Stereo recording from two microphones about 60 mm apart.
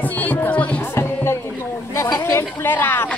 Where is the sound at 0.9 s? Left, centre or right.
Left.